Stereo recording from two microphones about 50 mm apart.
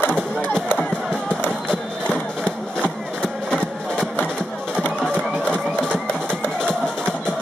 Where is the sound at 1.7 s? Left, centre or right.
Left.